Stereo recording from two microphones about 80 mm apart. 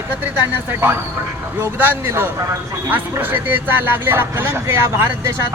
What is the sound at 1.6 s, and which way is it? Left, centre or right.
Speech, right.